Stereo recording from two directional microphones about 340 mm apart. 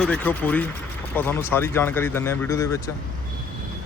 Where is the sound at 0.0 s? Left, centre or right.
Centre.